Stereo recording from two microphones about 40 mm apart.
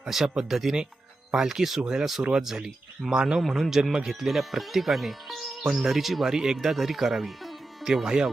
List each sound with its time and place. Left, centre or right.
0.0 s speech: centre
8.0 s speech: centre